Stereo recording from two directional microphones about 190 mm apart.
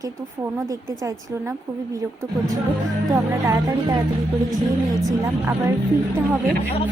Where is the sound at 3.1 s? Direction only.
20° right (ahead or behind).